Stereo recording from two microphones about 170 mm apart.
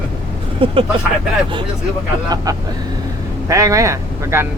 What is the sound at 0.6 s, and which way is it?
Speech, 30° right (ahead or behind).